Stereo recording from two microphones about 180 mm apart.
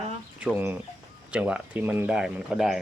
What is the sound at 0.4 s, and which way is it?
Speech, 10° right (ahead or behind).